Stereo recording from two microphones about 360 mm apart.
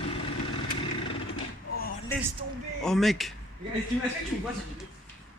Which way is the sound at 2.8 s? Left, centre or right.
Centre.